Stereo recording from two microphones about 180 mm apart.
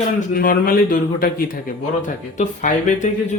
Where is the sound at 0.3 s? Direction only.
55° left (ahead or behind).